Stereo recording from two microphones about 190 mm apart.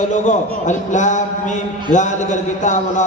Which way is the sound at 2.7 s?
40° left (ahead or behind).